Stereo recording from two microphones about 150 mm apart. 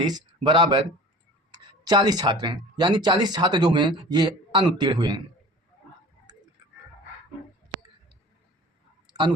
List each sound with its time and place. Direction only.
0.0 s speech: 30° right (ahead or behind)